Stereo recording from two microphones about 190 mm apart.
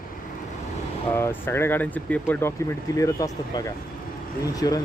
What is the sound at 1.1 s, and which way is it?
Speech, 10° left (ahead or behind).